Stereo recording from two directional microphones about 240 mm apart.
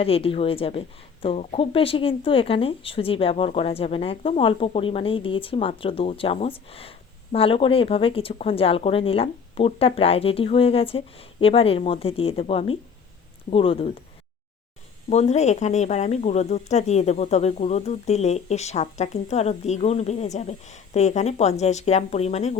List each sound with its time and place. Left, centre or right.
0.0 s speech: left
15.1 s speech: left